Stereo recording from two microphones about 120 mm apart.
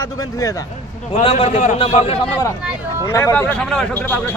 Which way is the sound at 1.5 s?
90° left.